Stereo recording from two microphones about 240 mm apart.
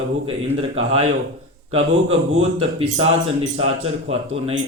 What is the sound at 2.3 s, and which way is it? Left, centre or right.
A man's voice, right.